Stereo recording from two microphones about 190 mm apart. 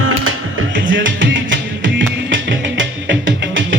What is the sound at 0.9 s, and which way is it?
Music, 80° right.